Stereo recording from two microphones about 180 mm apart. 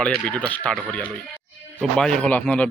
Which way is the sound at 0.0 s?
5° left (ahead or behind).